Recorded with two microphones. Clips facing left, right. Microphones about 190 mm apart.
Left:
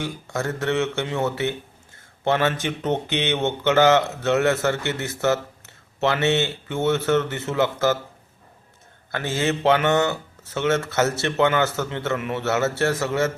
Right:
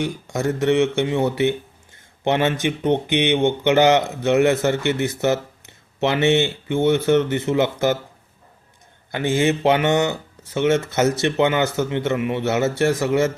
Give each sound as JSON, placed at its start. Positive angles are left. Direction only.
{"t": 0.0, "sound": "speech", "side_deg": -20}
{"t": 9.1, "sound": "speech", "side_deg": -15}